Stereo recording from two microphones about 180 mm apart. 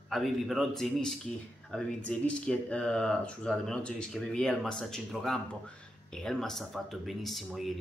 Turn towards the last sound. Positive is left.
turn(degrees=0)  # may be behind; listen again after turning